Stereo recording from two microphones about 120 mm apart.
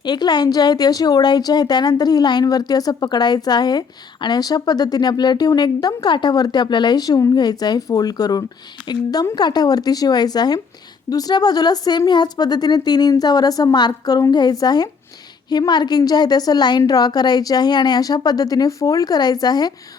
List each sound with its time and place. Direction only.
0.0 s speech: 40° left (ahead or behind)